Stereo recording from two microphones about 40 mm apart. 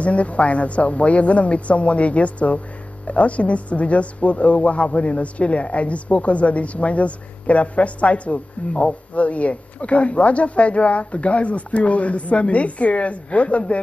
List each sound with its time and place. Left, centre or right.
0.0 s speech: left